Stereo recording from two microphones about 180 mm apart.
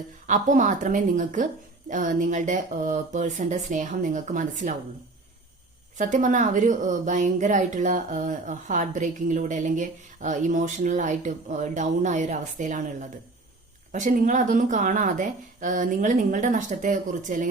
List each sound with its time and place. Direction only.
0.3 s speech: 45° right (ahead or behind)
6.0 s speech: 45° right (ahead or behind)